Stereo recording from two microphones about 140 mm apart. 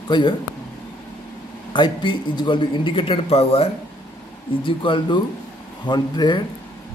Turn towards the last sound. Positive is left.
turn(degrees=30)  # may be behind; listen again after turning